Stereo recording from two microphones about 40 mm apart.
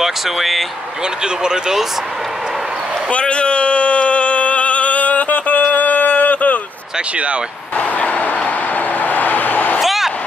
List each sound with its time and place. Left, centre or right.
0.0 s speech: centre
1.2 s speech: centre
3.1 s a sound: left
7.7 s a sound: left
8.7 s vehicle: left
9.8 s vehicle: centre